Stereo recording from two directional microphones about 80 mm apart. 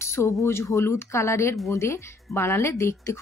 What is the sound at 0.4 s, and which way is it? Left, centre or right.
Speech, left.